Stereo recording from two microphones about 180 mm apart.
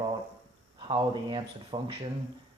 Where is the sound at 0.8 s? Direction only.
25° right (ahead or behind).